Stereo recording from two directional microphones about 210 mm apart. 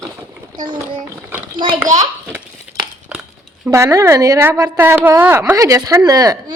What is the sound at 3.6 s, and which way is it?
A woman's voice, 15° right (ahead or behind).